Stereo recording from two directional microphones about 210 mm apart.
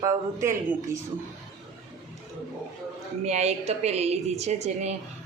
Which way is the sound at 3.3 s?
30° right (ahead or behind).